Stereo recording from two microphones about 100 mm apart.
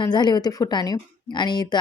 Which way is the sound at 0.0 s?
45° left (ahead or behind).